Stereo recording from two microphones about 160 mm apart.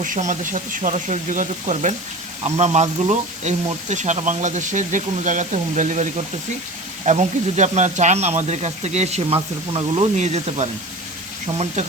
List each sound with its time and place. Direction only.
0.0 s speech: 55° right (ahead or behind)